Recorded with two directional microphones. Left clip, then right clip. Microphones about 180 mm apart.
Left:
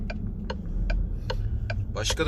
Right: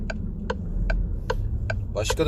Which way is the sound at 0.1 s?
55° right (ahead or behind).